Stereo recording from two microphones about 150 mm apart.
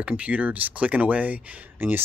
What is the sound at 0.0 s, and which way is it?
Speech, 10° right (ahead or behind).